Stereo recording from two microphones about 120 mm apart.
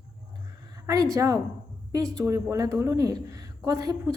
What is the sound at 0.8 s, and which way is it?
A woman's voice, 30° right (ahead or behind).